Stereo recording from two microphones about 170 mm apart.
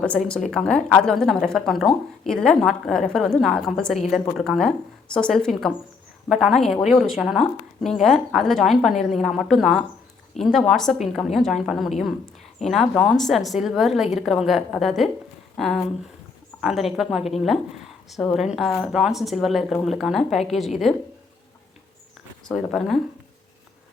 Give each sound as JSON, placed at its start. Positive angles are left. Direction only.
{"t": 0.2, "sound": "a woman's voice", "side_deg": 50}
{"t": 0.5, "sound": "a woman's voice", "side_deg": 5}
{"t": 22.4, "sound": "a woman's voice", "side_deg": 0}